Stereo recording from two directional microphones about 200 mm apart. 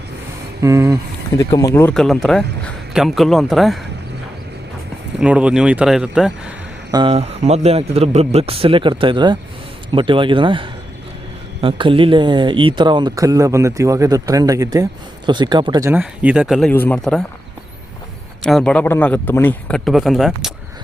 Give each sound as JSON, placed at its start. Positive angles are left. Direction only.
{"t": 0.6, "sound": "speech", "side_deg": -15}
{"t": 1.4, "sound": "a man's voice", "side_deg": 15}
{"t": 5.2, "sound": "a man's voice", "side_deg": -5}
{"t": 6.9, "sound": "speech", "side_deg": -25}
{"t": 15.9, "sound": "a man's voice", "side_deg": -10}
{"t": 18.4, "sound": "a man's voice", "side_deg": 5}